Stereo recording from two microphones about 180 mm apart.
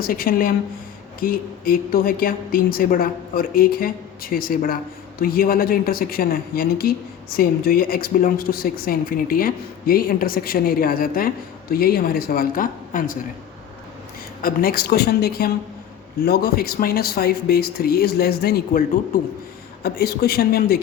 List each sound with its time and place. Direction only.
0.0 s a woman's voice: 50° left (ahead or behind)
14.4 s speech: 55° left (ahead or behind)